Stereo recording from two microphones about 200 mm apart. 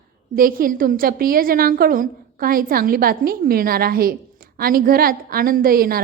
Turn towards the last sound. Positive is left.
turn(degrees=-45)  # may be behind; listen again after turning